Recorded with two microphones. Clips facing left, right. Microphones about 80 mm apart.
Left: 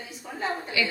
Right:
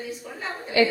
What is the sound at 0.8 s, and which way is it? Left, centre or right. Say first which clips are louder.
Speech: right 9 dB; right.